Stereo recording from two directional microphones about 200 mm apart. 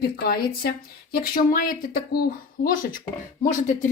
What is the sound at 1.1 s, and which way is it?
Speech, 45° left (ahead or behind).